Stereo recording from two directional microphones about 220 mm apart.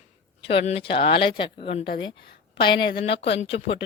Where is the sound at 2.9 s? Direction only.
50° left (ahead or behind).